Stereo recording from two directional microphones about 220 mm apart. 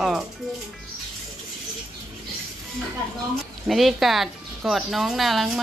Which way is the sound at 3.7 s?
Centre (ahead or behind).